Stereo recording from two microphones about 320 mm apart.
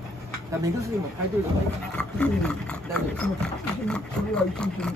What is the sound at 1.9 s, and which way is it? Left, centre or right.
Speech, centre.